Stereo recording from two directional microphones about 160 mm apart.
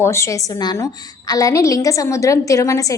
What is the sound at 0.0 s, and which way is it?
A woman's voice, 15° left (ahead or behind).